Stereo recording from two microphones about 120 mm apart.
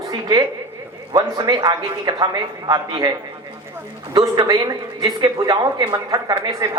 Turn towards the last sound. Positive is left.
turn(degrees=-30)  # may be behind; listen again after turning